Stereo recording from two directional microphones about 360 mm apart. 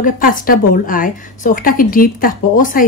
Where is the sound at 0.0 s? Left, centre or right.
Left.